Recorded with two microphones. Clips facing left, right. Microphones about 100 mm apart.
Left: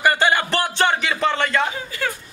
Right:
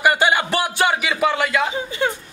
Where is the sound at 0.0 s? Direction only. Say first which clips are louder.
Right 1 dB; 15° right (ahead or behind).